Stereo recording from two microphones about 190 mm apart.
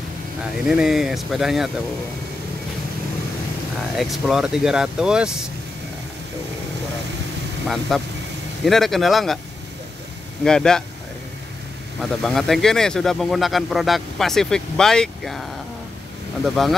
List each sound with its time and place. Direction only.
0.7 s speech: 5° right (ahead or behind)
3.9 s speech: centre (ahead or behind)
7.6 s speech: centre (ahead or behind)
10.4 s speech: 5° left (ahead or behind)
12.0 s speech: centre (ahead or behind)
16.4 s speech: centre (ahead or behind)